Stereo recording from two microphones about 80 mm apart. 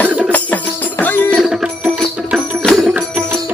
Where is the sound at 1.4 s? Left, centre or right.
Centre.